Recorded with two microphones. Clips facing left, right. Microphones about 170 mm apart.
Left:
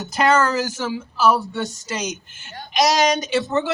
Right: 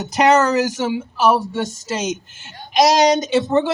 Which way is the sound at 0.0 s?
20° right (ahead or behind).